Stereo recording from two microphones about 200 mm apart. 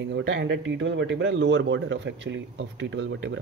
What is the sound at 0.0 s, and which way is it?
Speech, 65° right (ahead or behind).